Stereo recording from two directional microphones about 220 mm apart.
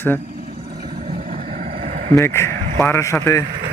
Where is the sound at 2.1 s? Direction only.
10° left (ahead or behind).